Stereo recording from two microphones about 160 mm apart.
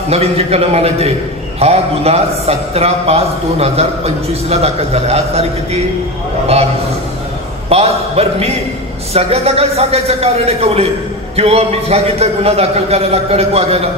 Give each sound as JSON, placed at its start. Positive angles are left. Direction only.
{"t": 0.1, "sound": "a man's voice", "side_deg": -40}
{"t": 7.7, "sound": "a man's voice", "side_deg": -40}